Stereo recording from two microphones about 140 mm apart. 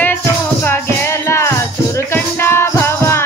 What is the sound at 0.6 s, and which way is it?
Music, 15° left (ahead or behind).